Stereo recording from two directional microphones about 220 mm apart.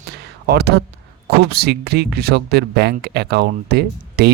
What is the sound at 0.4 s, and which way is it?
Speech, 45° right (ahead or behind).